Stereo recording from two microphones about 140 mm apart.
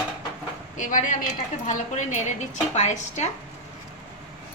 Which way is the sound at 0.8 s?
65° left (ahead or behind).